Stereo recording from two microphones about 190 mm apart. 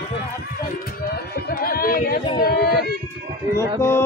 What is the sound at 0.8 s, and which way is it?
Chatter, 50° left (ahead or behind).